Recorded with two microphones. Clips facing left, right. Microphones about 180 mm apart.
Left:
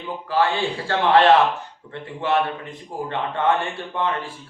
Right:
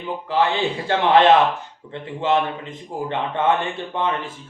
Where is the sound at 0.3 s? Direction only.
20° right (ahead or behind).